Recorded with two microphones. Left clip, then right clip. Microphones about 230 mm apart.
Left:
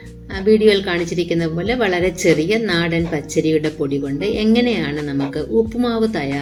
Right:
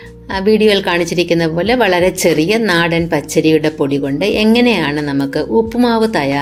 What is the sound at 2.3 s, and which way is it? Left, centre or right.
Speech, right.